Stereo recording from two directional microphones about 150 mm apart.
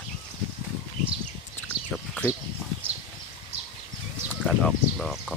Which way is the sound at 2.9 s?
45° right (ahead or behind).